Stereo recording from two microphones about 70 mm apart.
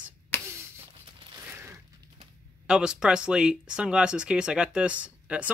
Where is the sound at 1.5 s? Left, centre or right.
Right.